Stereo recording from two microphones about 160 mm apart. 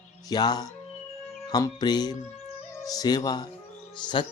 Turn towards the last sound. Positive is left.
turn(degrees=30)  # may be behind; listen again after turning